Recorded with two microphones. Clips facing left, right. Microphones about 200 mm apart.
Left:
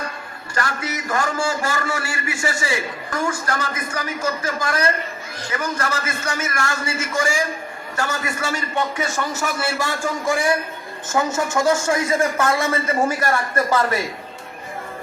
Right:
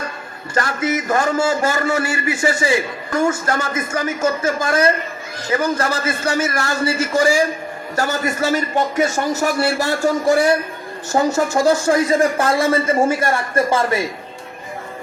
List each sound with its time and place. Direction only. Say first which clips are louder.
0.5 s a man's voice: right 6 dB; 20° right (ahead or behind)